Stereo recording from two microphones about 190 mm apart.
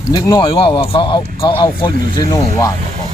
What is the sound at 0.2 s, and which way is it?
Speech, 20° left (ahead or behind).